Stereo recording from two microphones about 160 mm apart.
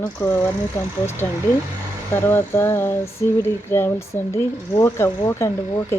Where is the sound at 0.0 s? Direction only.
10° left (ahead or behind).